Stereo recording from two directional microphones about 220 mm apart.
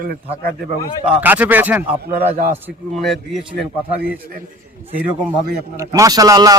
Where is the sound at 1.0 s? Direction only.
5° right (ahead or behind).